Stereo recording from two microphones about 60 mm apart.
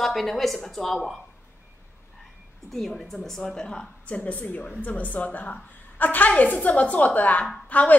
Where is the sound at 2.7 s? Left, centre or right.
Centre.